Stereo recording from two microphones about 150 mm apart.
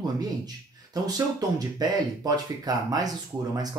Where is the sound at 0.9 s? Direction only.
25° right (ahead or behind).